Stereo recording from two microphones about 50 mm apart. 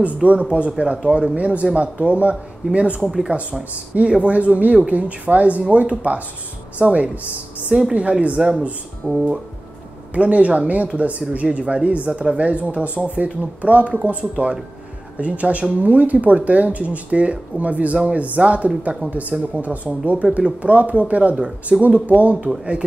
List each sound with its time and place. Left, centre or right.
0.0 s speech: right
3.0 s speech: centre
3.9 s speech: right
8.4 s speech: centre
9.0 s speech: right